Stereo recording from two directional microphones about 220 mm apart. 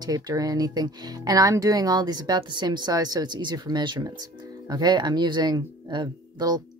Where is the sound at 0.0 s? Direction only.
15° right (ahead or behind).